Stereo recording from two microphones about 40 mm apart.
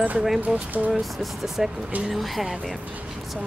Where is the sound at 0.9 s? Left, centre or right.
Centre.